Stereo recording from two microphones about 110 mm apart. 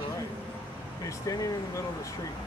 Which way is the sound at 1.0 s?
35° left (ahead or behind).